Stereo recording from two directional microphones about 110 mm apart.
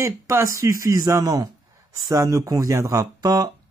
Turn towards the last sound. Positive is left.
turn(degrees=-35)  # may be behind; listen again after turning